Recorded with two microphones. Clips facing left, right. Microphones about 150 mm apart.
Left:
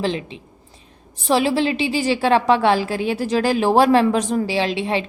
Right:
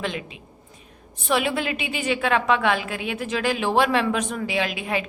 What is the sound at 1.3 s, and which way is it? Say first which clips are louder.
A woman's voice: left 6 dB; 30° left (ahead or behind).